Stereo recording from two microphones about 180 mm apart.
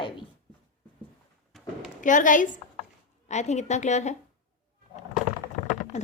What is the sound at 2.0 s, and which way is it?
A woman's voice, 45° left (ahead or behind).